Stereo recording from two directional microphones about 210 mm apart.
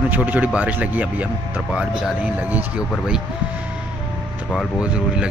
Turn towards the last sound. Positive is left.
turn(degrees=-5)  # may be behind; listen again after turning